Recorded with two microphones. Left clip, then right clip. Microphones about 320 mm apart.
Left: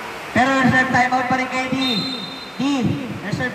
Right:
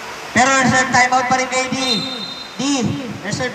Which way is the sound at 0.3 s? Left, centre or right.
Centre.